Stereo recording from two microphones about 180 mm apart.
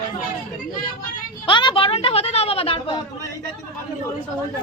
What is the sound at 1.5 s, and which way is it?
Speech, 25° left (ahead or behind).